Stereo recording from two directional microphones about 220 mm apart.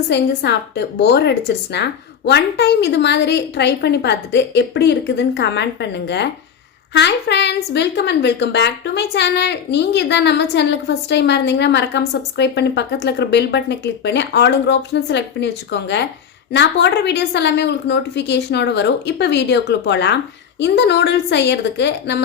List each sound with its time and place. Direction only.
0.1 s a woman's voice: 50° left (ahead or behind)